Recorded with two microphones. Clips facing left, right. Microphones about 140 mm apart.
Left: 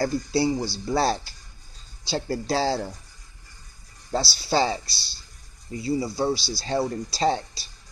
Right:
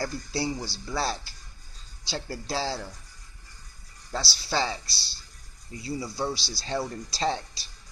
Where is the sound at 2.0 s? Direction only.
45° left (ahead or behind).